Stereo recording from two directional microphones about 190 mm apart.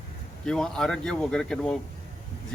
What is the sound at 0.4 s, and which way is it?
A man's voice, 5° left (ahead or behind).